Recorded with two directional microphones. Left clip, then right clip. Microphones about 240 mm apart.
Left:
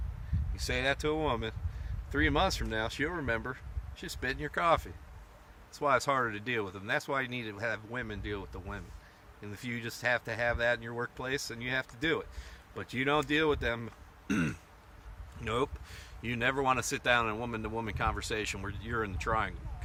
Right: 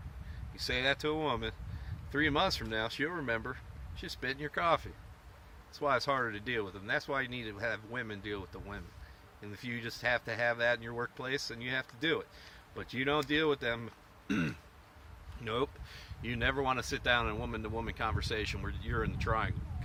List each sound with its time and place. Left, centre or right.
0.5 s speech: centre